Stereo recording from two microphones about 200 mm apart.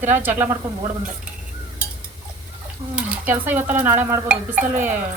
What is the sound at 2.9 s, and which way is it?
Speech, 10° right (ahead or behind).